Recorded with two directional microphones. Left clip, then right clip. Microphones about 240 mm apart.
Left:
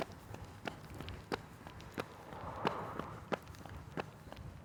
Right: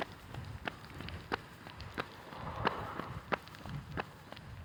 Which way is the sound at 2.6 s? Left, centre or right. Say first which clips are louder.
Right 3 dB; centre.